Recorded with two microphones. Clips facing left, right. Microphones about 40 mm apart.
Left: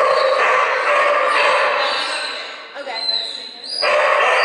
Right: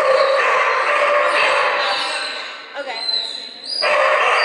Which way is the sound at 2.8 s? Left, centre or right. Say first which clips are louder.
Right 2 dB; right.